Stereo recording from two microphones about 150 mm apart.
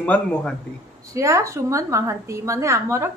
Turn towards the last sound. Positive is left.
turn(degrees=-20)  # may be behind; listen again after turning